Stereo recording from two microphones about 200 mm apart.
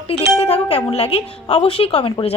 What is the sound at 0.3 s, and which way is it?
A woman's voice, 30° left (ahead or behind).